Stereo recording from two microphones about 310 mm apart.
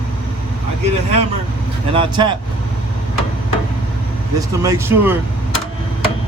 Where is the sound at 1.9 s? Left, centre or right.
Centre.